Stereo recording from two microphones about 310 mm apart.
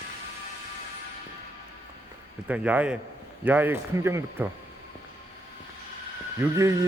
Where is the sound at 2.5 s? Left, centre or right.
Centre.